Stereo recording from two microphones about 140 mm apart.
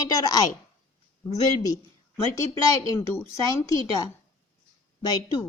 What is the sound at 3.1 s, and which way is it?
A woman's voice, 20° left (ahead or behind).